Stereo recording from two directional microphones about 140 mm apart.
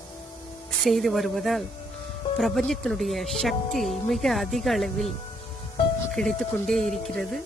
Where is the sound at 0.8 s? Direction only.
Centre (ahead or behind).